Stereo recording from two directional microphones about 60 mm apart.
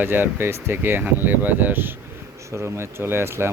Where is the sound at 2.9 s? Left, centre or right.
Right.